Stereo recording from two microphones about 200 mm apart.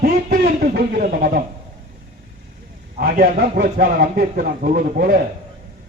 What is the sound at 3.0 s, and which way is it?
A man's voice, 50° right (ahead or behind).